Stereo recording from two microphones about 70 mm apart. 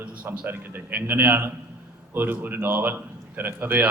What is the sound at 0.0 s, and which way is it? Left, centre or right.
A man's voice, right.